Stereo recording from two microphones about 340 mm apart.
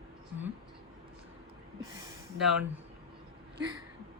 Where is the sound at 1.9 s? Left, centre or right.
Centre.